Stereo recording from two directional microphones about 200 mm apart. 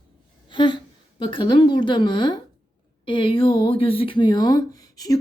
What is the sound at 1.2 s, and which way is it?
Speech, 25° left (ahead or behind).